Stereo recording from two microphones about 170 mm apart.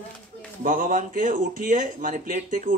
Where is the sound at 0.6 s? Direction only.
55° right (ahead or behind).